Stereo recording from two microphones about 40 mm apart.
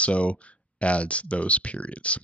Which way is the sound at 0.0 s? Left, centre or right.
Left.